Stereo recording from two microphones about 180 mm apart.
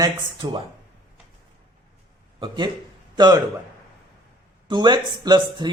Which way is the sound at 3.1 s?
25° right (ahead or behind).